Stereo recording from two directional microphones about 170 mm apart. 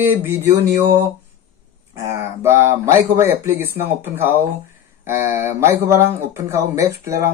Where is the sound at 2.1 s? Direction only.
15° right (ahead or behind).